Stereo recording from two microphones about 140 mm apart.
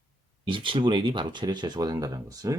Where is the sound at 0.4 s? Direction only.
35° right (ahead or behind).